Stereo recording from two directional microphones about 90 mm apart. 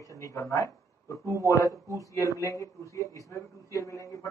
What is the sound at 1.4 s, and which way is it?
Speech, 35° left (ahead or behind).